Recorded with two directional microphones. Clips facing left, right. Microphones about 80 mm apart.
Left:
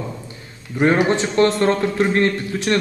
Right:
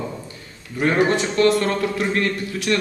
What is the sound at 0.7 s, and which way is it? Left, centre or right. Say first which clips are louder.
A man's voice: left 2 dB; left.